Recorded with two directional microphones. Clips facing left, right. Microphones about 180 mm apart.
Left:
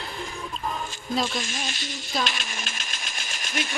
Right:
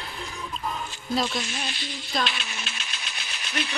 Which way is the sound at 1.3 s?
45° left (ahead or behind).